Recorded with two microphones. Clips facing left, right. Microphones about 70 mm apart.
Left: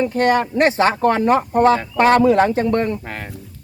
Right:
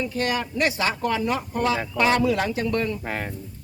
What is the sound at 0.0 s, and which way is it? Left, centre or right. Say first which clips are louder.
Speech: left 9 dB; left.